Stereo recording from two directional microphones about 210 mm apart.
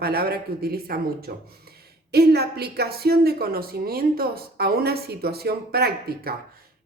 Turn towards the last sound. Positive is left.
turn(degrees=-50)  # may be behind; listen again after turning